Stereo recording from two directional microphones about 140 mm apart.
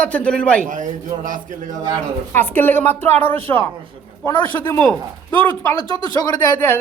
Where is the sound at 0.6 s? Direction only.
65° right (ahead or behind).